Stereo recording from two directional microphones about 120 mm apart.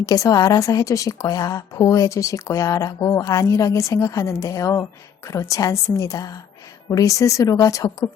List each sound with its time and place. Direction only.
0.0 s a woman's voice: 30° left (ahead or behind)